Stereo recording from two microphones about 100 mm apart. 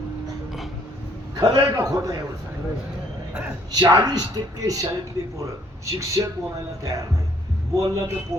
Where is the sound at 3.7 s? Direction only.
40° right (ahead or behind).